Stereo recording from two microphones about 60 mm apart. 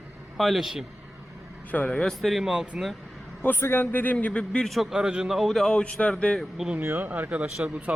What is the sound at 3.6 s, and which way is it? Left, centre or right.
Speech, left.